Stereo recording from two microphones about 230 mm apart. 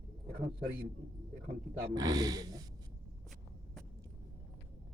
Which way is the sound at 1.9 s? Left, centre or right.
Centre.